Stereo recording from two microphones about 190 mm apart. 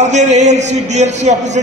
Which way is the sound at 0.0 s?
40° right (ahead or behind).